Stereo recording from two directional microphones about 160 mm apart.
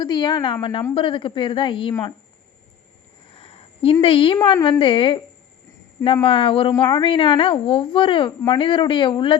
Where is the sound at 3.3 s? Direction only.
35° left (ahead or behind).